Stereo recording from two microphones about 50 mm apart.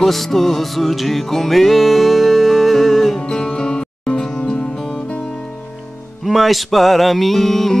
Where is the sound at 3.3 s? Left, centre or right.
Centre.